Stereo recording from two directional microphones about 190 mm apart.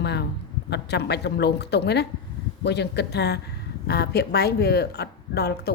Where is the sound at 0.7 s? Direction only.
60° left (ahead or behind).